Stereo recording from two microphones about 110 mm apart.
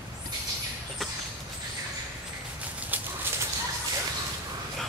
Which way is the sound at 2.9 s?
15° right (ahead or behind).